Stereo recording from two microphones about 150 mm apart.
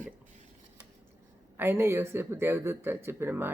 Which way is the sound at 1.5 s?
15° right (ahead or behind).